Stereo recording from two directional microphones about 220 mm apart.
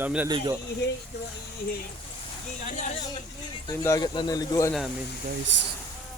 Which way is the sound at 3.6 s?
15° left (ahead or behind).